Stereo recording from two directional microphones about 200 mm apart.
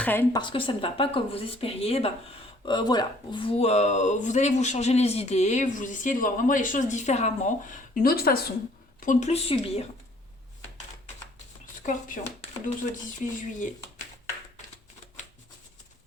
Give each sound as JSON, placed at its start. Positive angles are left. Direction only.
{"t": 0.0, "sound": "speech", "side_deg": 10}
{"t": 0.3, "sound": "speech", "side_deg": 25}
{"t": 9.0, "sound": "speech", "side_deg": 40}
{"t": 11.9, "sound": "speech", "side_deg": 40}